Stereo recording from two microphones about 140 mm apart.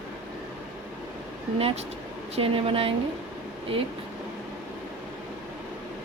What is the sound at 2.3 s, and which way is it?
Speech, 40° right (ahead or behind).